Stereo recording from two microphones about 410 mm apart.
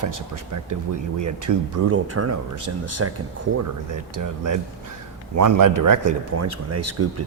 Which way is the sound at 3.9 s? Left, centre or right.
Right.